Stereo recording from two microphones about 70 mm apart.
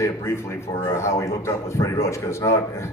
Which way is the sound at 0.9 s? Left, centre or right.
Left.